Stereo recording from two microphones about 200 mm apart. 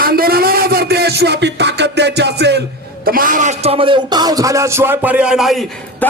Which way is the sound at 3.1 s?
45° right (ahead or behind).